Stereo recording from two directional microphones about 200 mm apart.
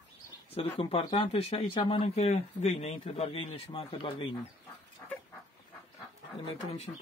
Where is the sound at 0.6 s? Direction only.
25° left (ahead or behind).